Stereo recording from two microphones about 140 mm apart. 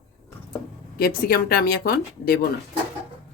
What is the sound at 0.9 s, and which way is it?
Speech, 90° left.